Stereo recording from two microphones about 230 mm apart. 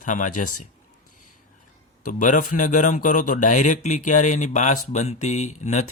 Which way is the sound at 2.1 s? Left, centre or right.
Left.